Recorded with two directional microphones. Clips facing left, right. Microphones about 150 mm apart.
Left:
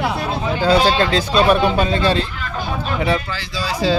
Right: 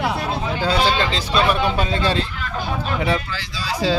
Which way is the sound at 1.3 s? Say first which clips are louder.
Left 3 dB; 35° left (ahead or behind).